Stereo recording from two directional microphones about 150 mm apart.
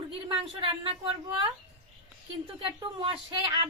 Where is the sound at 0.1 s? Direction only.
35° right (ahead or behind).